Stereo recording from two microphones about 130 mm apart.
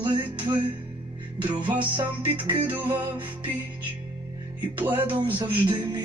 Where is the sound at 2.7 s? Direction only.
15° right (ahead or behind).